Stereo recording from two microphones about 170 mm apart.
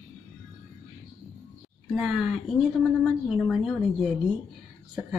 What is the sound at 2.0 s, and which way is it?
A woman's voice, centre (ahead or behind).